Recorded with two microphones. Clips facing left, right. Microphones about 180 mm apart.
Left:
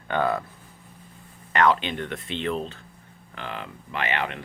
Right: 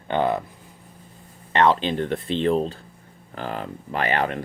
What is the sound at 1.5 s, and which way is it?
Speech, 30° right (ahead or behind).